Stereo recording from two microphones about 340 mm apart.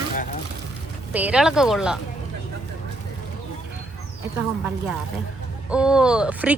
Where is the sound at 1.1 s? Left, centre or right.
Centre.